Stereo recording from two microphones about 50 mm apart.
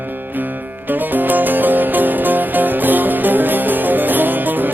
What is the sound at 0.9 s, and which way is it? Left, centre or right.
Music, right.